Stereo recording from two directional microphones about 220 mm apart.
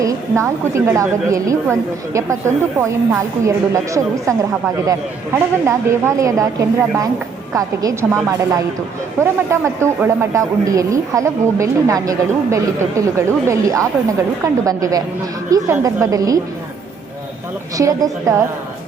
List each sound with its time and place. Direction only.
0.0 s speech: 15° right (ahead or behind)
17.7 s speech: 15° right (ahead or behind)